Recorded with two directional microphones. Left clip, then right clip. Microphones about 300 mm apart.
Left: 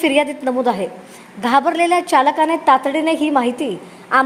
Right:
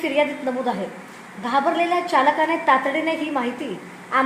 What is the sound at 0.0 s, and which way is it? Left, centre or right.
A woman's voice, left.